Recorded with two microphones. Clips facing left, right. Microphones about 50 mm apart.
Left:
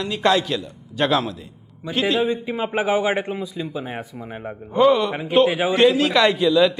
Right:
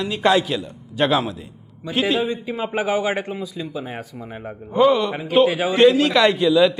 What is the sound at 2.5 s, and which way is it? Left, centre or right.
Speech, centre.